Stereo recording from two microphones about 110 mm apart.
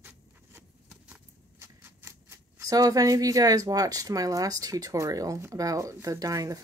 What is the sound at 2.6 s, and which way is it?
Speech, 35° right (ahead or behind).